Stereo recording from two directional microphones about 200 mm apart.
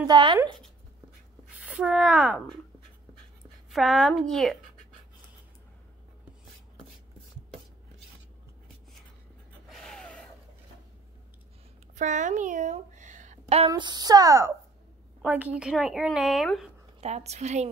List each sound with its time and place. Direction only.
0.0 s speech: 25° right (ahead or behind)
1.5 s speech: 5° right (ahead or behind)
3.7 s a woman's voice: centre (ahead or behind)
9.7 s gasp: centre (ahead or behind)
11.9 s speech: 40° right (ahead or behind)
13.7 s a woman's voice: 20° right (ahead or behind); by 16.7 s centre (ahead or behind)
17.0 s a woman's voice: 35° right (ahead or behind)